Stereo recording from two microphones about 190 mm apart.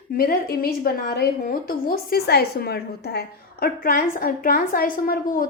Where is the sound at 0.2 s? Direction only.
50° left (ahead or behind).